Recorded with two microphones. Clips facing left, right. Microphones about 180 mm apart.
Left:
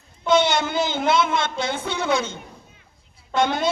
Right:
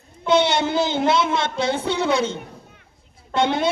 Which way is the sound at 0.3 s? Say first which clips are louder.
Right 1 dB; 30° right (ahead or behind).